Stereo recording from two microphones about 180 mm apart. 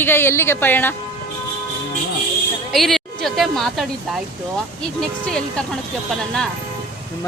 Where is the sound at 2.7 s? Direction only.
Centre (ahead or behind).